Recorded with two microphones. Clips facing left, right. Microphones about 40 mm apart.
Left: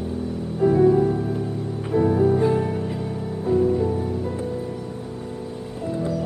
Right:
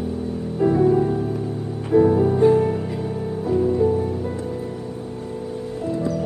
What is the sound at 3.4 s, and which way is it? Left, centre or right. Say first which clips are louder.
Music: even; centre.